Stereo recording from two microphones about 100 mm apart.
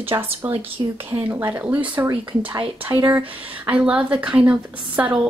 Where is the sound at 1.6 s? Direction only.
15° right (ahead or behind).